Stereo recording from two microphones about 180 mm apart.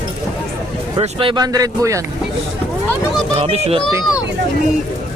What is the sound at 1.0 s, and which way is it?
Speech, 30° right (ahead or behind).